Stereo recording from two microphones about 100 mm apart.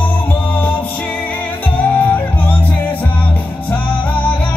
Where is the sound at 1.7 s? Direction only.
15° left (ahead or behind).